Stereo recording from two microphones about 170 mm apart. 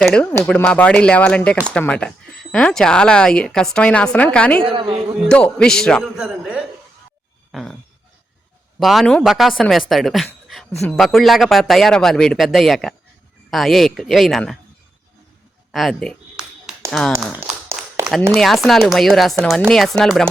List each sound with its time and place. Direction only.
0.0 s speech: 5° left (ahead or behind)
4.6 s a woman's voice: 30° right (ahead or behind)
5.2 s speech: 5° left (ahead or behind)
7.5 s a sound: centre (ahead or behind)
8.8 s speech: centre (ahead or behind)
9.9 s a sound: centre (ahead or behind)
10.8 s speech: centre (ahead or behind)
15.7 s a sound: centre (ahead or behind)
18.3 s speech: centre (ahead or behind)